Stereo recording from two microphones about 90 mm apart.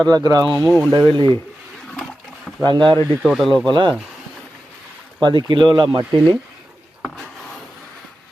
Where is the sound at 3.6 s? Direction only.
55° right (ahead or behind).